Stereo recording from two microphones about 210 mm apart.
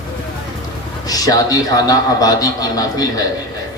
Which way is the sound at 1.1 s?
15° left (ahead or behind).